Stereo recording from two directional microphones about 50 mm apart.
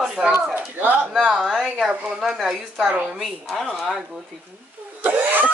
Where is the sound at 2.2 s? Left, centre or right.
Centre.